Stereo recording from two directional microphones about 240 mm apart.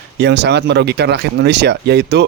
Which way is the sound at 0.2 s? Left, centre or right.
Right.